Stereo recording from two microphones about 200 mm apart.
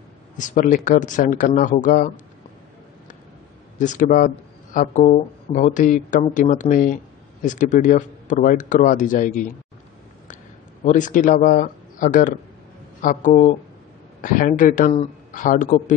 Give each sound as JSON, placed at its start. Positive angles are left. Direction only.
{"t": 0.4, "sound": "speech", "side_deg": 40}
{"t": 3.7, "sound": "speech", "side_deg": 40}
{"t": 10.8, "sound": "speech", "side_deg": 40}